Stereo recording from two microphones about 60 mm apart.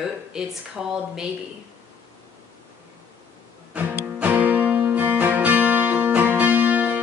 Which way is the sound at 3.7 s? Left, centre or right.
Right.